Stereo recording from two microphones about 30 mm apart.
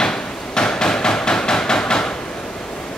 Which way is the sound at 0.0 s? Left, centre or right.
Left.